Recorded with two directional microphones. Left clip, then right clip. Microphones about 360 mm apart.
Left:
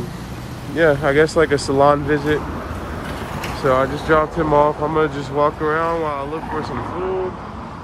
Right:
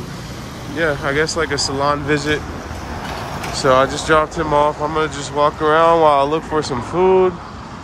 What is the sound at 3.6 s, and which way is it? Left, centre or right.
Speech, centre.